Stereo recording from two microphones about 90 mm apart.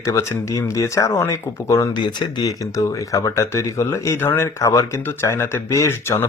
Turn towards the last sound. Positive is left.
turn(degrees=30)  # may be behind; listen again after turning